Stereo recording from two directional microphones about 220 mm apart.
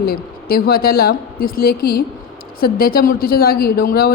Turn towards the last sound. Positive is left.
turn(degrees=45)  # may be behind; listen again after turning